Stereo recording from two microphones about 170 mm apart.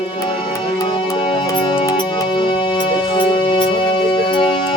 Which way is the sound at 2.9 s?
30° left (ahead or behind).